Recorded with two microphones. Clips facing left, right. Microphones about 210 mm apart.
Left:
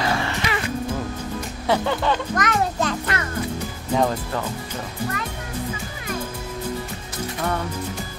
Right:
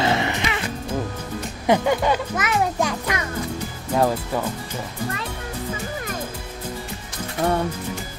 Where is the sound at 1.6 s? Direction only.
15° right (ahead or behind).